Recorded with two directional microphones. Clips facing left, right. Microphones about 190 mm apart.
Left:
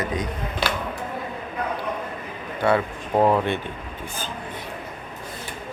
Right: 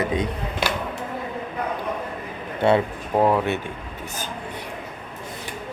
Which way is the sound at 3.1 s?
5° right (ahead or behind).